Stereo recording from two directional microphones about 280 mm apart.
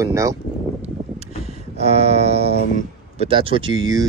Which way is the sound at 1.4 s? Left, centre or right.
Right.